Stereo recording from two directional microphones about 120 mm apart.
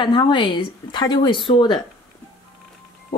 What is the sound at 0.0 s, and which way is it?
A woman's voice, 40° left (ahead or behind).